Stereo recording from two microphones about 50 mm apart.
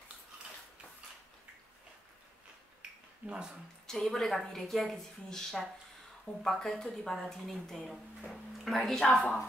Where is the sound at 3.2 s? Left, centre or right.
Right.